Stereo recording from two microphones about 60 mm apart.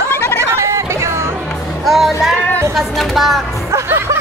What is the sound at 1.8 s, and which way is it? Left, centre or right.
Speech, centre.